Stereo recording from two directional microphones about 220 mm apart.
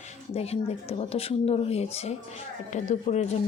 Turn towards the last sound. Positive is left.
turn(degrees=35)  # may be behind; listen again after turning